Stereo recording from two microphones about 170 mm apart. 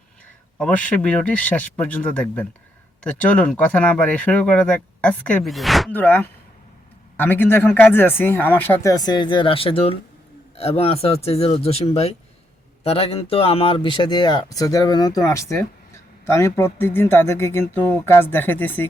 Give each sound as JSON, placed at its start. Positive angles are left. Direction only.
{"t": 0.6, "sound": "speech", "side_deg": 10}
{"t": 5.9, "sound": "speech", "side_deg": 10}